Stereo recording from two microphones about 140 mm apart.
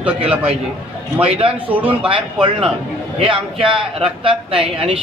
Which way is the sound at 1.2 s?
45° right (ahead or behind).